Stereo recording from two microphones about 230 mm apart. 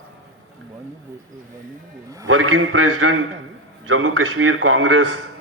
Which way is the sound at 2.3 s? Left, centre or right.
Right.